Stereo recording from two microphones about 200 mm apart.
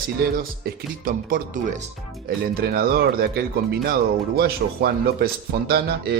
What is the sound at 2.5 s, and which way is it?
Speech, 50° right (ahead or behind).